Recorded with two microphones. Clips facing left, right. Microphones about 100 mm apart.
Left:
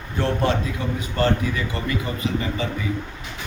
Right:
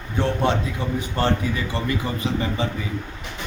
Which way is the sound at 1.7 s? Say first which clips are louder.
Right 1 dB; 30° right (ahead or behind).